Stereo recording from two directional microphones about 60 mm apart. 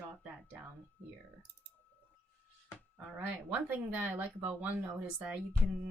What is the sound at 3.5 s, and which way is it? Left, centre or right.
Speech, right.